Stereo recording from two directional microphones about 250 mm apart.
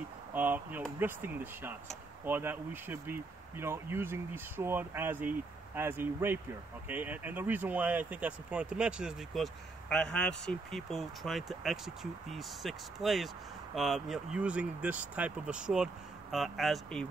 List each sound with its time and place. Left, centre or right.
0.3 s speech: centre